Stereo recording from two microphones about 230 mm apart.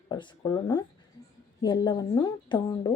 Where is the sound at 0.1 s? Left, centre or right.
Centre.